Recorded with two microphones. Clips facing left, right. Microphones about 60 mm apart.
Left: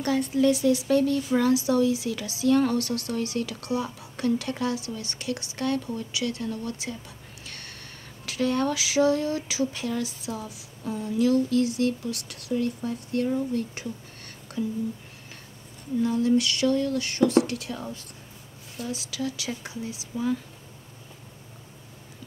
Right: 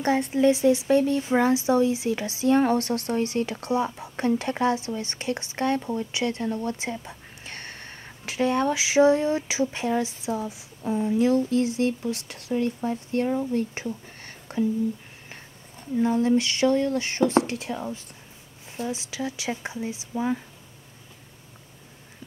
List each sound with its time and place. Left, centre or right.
0.0 s speech: right
16.0 s speech: right